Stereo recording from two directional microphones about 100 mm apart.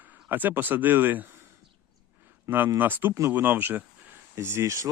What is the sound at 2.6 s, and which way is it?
Speech, 20° right (ahead or behind).